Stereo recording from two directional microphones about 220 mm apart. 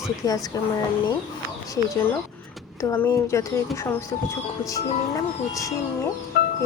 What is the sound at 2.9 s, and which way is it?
A woman's voice, 10° left (ahead or behind).